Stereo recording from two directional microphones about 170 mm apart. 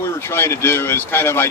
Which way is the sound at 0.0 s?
15° left (ahead or behind).